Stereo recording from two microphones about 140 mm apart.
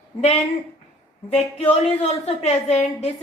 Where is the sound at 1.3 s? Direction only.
45° left (ahead or behind).